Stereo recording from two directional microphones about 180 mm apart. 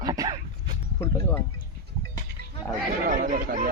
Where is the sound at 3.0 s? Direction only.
45° right (ahead or behind).